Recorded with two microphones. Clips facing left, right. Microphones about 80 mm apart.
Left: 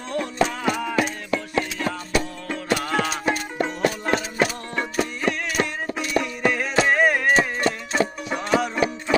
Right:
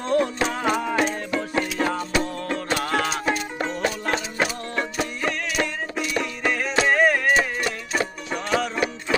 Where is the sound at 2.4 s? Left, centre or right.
Centre.